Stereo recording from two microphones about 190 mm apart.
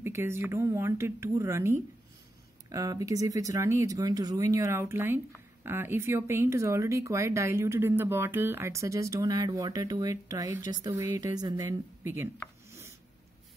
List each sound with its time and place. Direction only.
0.0 s speech: 15° right (ahead or behind)